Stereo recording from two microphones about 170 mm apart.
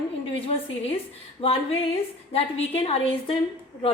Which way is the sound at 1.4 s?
30° left (ahead or behind).